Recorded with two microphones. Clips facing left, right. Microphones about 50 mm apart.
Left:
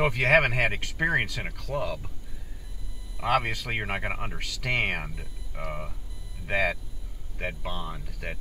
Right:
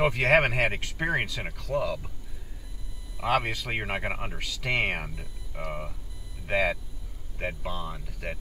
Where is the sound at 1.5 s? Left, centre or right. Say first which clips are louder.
Right 2 dB; left.